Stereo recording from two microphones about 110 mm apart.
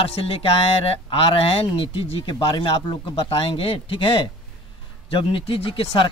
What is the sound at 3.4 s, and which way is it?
A man's voice, 60° left (ahead or behind).